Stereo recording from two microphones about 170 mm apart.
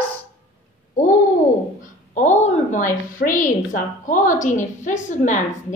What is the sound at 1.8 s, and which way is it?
A woman's voice, 45° left (ahead or behind).